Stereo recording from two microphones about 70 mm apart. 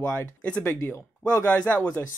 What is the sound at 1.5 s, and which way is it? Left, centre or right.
Speech, centre.